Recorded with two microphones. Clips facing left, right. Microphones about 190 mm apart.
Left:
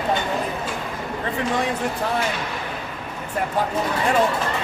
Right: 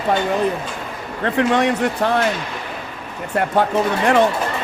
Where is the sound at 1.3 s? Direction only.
70° right (ahead or behind).